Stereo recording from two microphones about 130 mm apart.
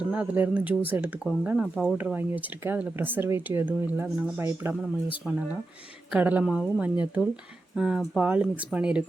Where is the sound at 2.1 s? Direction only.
15° right (ahead or behind).